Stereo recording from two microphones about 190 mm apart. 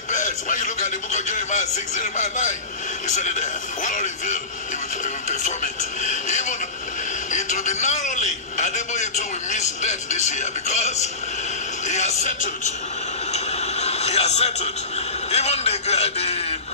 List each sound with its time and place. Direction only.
0.1 s a man's voice: 40° left (ahead or behind)
13.3 s television: 35° left (ahead or behind)
15.3 s a sound: 35° left (ahead or behind)